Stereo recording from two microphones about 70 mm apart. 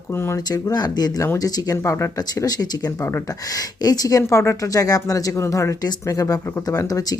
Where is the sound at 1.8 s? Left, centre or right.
Left.